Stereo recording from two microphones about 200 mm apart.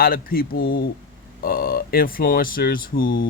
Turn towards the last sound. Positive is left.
turn(degrees=45)  # may be behind; listen again after turning